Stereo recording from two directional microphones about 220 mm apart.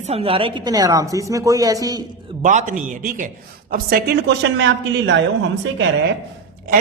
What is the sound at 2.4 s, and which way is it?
A woman's voice, 35° right (ahead or behind).